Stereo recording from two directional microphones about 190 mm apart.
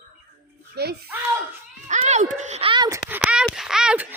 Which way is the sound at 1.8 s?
35° right (ahead or behind).